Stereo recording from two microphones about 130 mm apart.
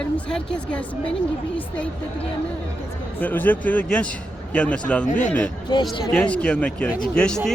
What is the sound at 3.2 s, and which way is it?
Speech, 15° left (ahead or behind).